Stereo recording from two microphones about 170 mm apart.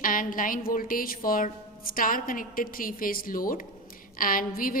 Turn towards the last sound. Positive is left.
turn(degrees=55)  # may be behind; listen again after turning